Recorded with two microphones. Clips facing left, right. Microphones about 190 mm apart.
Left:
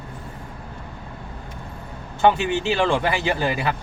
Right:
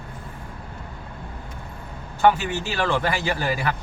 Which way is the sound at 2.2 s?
25° left (ahead or behind).